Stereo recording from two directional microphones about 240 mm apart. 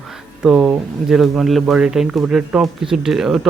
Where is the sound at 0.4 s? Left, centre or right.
Centre.